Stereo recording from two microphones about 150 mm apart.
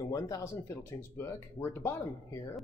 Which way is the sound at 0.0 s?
20° left (ahead or behind).